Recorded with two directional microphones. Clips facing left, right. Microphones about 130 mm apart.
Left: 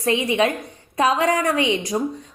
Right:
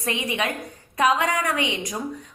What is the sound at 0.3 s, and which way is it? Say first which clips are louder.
A woman's voice: left 7 dB; 30° left (ahead or behind).